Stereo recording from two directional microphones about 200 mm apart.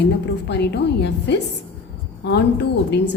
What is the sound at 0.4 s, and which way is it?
Speech, 55° left (ahead or behind).